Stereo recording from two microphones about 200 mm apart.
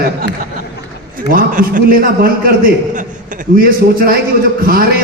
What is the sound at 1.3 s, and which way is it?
A man's voice, 45° right (ahead or behind).